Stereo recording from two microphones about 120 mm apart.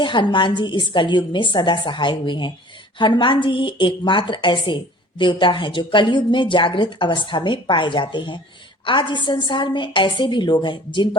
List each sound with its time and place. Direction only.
0.0 s a woman's voice: 40° left (ahead or behind)